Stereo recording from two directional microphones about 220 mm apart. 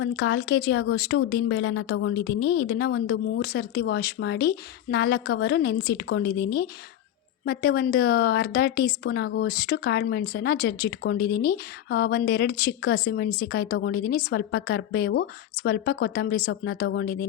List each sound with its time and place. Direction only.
0.0 s a woman's voice: 50° left (ahead or behind)